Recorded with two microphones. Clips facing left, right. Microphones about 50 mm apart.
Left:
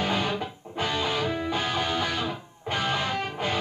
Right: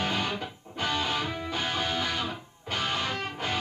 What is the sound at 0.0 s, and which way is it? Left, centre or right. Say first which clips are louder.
Music: left 3 dB; centre.